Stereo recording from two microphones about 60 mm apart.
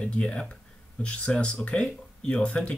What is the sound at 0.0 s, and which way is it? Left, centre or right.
Speech, centre.